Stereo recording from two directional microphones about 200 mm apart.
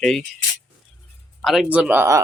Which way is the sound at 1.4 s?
Centre (ahead or behind).